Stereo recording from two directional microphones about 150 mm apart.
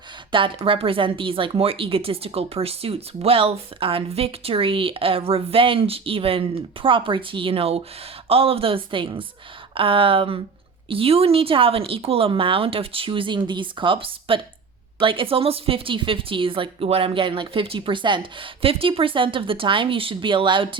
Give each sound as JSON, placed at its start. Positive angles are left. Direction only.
{"t": 0.3, "sound": "speech", "side_deg": -35}